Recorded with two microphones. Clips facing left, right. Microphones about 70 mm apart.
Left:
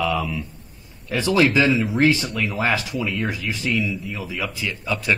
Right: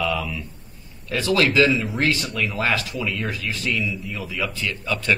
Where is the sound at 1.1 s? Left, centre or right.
Centre.